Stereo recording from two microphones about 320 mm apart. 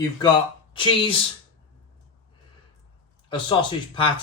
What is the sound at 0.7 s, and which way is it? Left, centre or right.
Speech, centre.